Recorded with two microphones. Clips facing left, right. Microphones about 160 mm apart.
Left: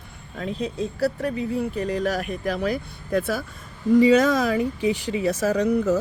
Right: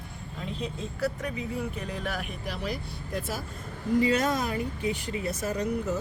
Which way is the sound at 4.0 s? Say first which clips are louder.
Left 8 dB; 90° left.